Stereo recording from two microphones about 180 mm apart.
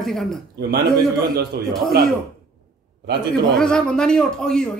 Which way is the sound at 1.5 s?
65° right (ahead or behind).